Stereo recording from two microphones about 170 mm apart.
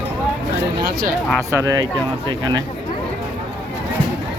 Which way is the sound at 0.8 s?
70° right (ahead or behind).